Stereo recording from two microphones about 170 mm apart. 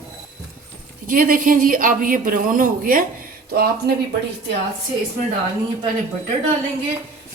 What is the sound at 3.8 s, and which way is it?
Speech, 70° right (ahead or behind).